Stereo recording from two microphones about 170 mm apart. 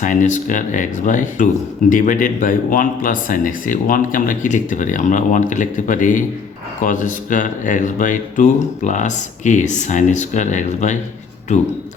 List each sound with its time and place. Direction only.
0.0 s speech: 50° left (ahead or behind)